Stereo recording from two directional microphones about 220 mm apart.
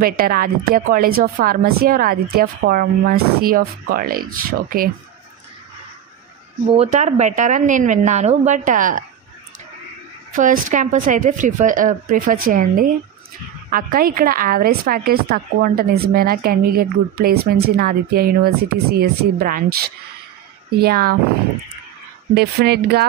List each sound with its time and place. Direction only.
0.0 s a woman's voice: 40° right (ahead or behind)
6.7 s a woman's voice: 30° right (ahead or behind)
10.3 s a woman's voice: 35° right (ahead or behind)
22.3 s speech: 45° right (ahead or behind)